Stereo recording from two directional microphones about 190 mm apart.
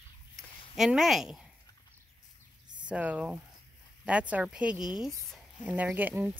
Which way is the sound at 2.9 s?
5° right (ahead or behind).